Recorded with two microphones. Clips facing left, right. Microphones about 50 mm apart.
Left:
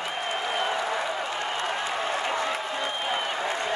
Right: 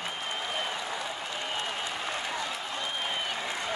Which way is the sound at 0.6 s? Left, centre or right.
Left.